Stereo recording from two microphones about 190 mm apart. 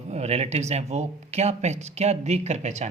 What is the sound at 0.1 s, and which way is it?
Speech, 35° right (ahead or behind).